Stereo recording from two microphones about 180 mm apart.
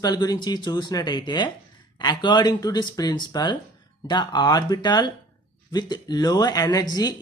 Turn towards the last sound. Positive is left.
turn(degrees=20)  # may be behind; listen again after turning